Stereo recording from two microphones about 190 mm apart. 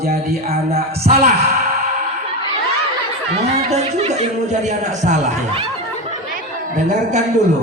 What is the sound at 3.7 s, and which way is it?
Music, 35° right (ahead or behind).